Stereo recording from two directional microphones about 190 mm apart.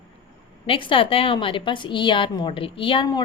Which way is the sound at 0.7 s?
25° left (ahead or behind).